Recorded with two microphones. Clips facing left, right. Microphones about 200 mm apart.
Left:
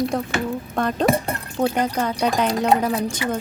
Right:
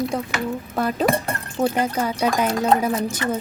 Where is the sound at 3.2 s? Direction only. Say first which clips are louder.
Right 2 dB; 10° left (ahead or behind).